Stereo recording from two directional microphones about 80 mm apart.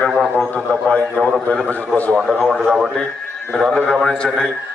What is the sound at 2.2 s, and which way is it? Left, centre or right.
Speech, centre.